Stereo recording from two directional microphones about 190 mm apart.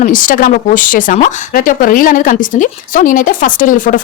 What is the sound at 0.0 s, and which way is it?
A woman's voice, 45° left (ahead or behind).